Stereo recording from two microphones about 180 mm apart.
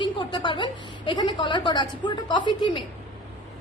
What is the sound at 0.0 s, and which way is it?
A woman's voice, 25° left (ahead or behind).